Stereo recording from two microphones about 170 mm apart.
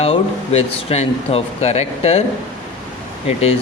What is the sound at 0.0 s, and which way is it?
Speech, 35° left (ahead or behind).